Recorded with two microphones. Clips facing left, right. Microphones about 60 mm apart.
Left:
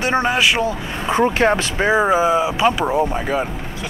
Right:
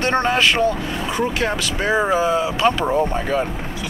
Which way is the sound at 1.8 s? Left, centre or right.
Centre.